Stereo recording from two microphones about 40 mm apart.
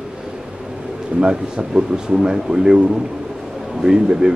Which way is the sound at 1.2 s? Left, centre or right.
Centre.